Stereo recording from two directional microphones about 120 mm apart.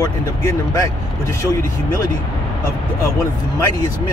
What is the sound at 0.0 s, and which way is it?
Speech, 25° left (ahead or behind).